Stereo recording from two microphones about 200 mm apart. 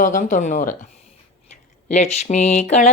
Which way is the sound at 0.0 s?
40° left (ahead or behind).